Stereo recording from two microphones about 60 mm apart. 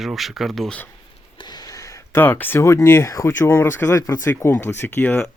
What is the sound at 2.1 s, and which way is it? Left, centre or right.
Speech, left.